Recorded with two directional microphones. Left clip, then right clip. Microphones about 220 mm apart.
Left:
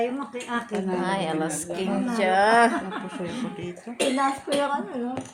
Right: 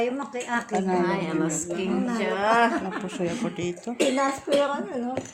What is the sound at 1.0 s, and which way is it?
A woman's voice, 45° left (ahead or behind).